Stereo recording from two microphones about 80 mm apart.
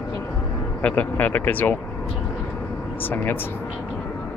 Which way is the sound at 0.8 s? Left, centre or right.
Left.